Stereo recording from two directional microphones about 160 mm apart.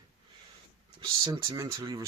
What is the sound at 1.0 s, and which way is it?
Speech, 25° right (ahead or behind).